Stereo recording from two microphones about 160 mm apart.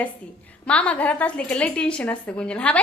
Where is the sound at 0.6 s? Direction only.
10° left (ahead or behind).